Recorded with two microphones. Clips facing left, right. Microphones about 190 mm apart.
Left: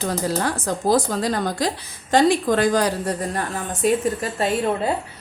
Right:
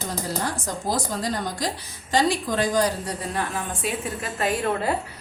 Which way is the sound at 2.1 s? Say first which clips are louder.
Left 6 dB; 55° left (ahead or behind).